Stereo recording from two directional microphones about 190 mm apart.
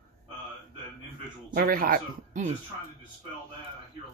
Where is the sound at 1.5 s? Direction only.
50° right (ahead or behind).